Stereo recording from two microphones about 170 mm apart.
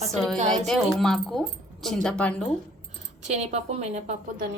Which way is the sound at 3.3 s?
40° right (ahead or behind).